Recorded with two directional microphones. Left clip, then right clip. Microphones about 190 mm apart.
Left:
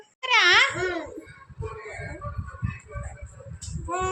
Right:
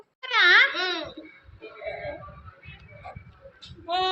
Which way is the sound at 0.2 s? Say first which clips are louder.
Even; centre (ahead or behind).